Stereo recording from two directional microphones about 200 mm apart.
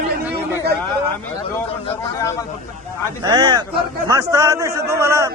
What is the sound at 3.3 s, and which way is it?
A man's voice, 20° right (ahead or behind).